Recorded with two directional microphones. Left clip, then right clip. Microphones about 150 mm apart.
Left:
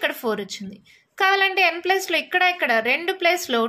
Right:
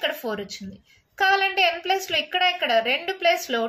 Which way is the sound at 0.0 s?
55° left (ahead or behind).